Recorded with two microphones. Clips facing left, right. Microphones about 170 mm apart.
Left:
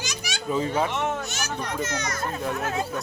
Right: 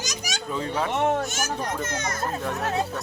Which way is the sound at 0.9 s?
45° right (ahead or behind).